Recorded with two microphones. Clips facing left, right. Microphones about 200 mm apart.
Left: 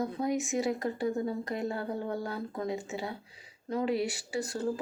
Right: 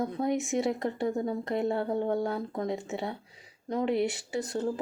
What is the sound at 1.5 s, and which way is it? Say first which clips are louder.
Speech: right 8 dB; 60° right (ahead or behind).